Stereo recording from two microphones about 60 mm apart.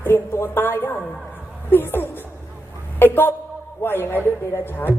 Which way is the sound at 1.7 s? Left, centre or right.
Left.